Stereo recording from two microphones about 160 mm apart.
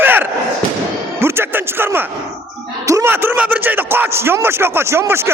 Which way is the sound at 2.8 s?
15° right (ahead or behind).